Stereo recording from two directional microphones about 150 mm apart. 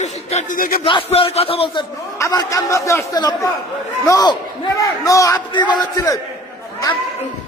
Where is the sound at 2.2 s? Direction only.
20° left (ahead or behind).